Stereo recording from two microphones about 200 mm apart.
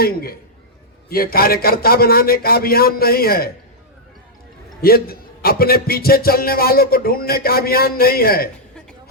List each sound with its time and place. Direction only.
0.0 s a man's voice: 50° left (ahead or behind)
4.8 s a man's voice: 50° left (ahead or behind)